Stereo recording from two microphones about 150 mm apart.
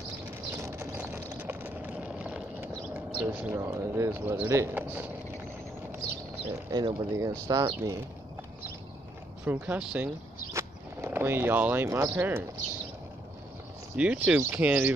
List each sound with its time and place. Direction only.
0.6 s vehicle: 20° right (ahead or behind)
3.3 s speech: 15° right (ahead or behind)
6.7 s speech: 25° right (ahead or behind)
9.4 s speech: 10° right (ahead or behind)
13.9 s speech: 10° right (ahead or behind)